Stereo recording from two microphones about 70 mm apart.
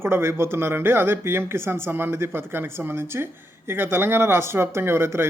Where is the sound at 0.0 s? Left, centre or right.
Right.